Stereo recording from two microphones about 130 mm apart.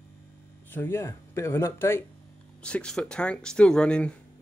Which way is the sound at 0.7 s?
15° left (ahead or behind).